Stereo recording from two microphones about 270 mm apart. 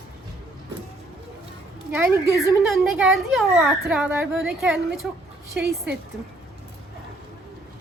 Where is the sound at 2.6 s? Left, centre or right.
Centre.